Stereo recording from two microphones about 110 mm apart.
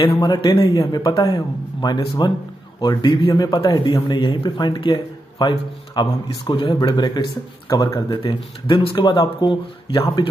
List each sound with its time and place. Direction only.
0.3 s speech: 50° left (ahead or behind)
0.7 s a man's voice: 35° left (ahead or behind)
3.1 s speech: 55° left (ahead or behind)
3.3 s speech: 40° left (ahead or behind); by 9.0 s 55° left (ahead or behind)
9.0 s speech: 45° left (ahead or behind)